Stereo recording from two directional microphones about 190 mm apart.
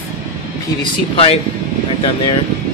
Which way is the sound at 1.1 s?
30° left (ahead or behind).